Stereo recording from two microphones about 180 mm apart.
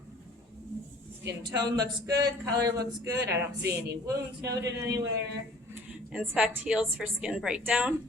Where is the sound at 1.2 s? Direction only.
20° right (ahead or behind).